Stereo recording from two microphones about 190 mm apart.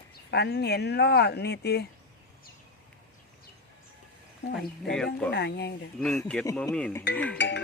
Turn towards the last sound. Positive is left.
turn(degrees=70)  # may be behind; listen again after turning